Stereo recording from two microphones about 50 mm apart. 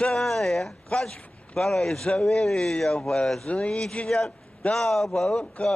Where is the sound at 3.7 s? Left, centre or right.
Centre.